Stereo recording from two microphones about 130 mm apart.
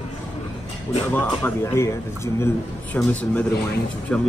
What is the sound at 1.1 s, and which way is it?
Speech, 15° left (ahead or behind).